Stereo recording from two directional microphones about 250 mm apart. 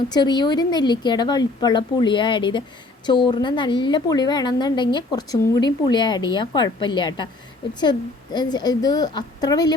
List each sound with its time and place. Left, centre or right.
0.1 s a woman's voice: centre